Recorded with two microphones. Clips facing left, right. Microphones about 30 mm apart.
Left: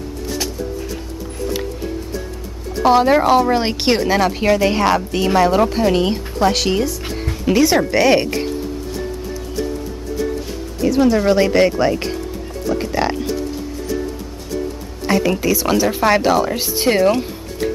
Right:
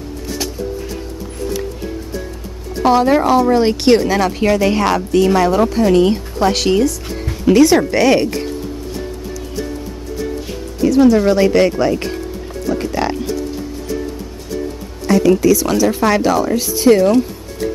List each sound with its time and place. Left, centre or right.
2.8 s speech: centre
6.3 s speech: centre
8.2 s speech: left
10.8 s music: centre
11.1 s speech: centre
15.0 s speech: centre